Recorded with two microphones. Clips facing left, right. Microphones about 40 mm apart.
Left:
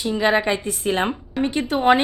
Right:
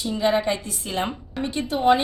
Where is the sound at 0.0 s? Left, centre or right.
Left.